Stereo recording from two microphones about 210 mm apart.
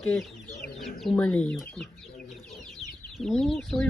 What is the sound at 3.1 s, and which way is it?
Speech, centre (ahead or behind).